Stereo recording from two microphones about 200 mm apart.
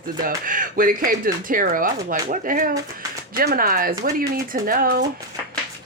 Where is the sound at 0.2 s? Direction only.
45° right (ahead or behind).